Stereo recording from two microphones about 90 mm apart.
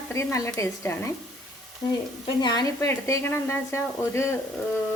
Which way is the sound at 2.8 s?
35° left (ahead or behind).